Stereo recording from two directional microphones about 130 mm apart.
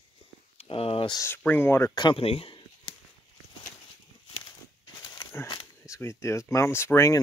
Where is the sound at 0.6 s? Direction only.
45° left (ahead or behind).